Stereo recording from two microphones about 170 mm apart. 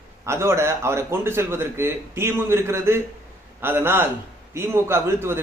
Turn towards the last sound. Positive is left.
turn(degrees=-15)  # may be behind; listen again after turning